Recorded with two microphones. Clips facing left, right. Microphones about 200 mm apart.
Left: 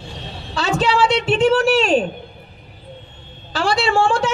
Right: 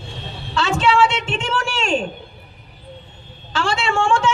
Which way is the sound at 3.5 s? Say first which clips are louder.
Left 3 dB; 35° left (ahead or behind).